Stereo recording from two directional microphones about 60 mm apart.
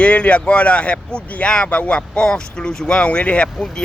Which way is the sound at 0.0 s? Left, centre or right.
Left.